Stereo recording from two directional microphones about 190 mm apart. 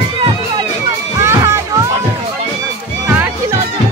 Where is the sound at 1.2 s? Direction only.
15° right (ahead or behind).